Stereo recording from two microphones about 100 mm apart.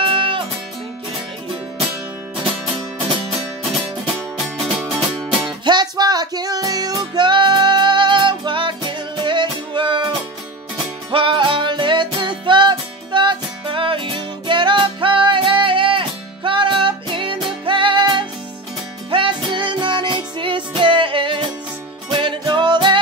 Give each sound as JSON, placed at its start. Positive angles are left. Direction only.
{"t": 0.0, "sound": "music", "side_deg": -60}
{"t": 4.6, "sound": "music", "side_deg": -5}
{"t": 5.7, "sound": "music", "side_deg": -45}